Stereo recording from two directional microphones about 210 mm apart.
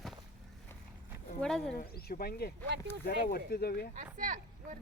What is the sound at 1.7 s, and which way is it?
Speech, 45° left (ahead or behind).